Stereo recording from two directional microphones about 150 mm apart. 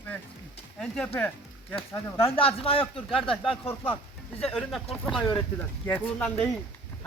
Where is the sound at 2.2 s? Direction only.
40° left (ahead or behind).